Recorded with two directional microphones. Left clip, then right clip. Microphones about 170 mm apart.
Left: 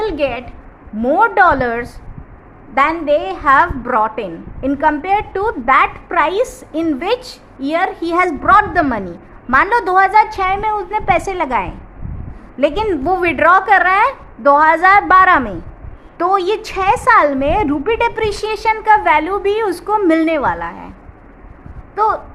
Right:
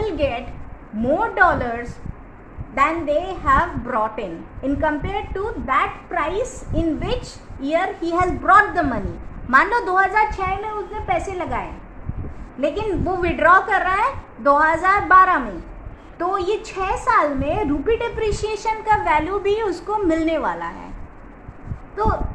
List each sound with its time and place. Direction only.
0.0 s a sound: 35° left (ahead or behind)
1.0 s a woman's voice: 45° left (ahead or behind); by 20.9 s 25° left (ahead or behind)
21.9 s a woman's voice: 45° left (ahead or behind)